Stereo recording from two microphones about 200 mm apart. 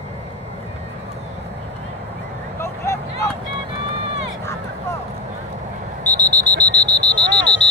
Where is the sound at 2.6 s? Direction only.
15° left (ahead or behind).